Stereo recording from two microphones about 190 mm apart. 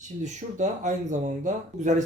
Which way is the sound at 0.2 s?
40° right (ahead or behind).